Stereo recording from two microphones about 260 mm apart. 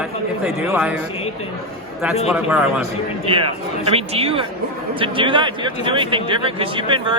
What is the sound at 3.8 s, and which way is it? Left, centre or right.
Speech, right.